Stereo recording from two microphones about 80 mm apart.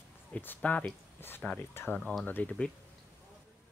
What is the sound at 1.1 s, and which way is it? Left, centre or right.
Speech, left.